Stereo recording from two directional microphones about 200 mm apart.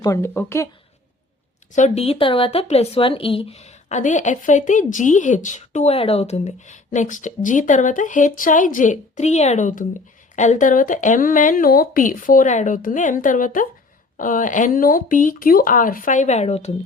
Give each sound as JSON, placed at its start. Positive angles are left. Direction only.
{"t": 0.0, "sound": "speech", "side_deg": 15}
{"t": 1.7, "sound": "speech", "side_deg": 35}